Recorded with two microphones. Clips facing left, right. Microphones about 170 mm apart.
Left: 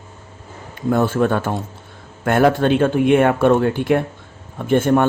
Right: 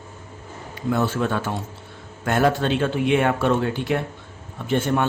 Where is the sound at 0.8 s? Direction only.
50° left (ahead or behind).